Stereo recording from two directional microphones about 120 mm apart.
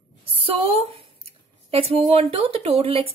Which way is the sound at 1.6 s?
50° right (ahead or behind).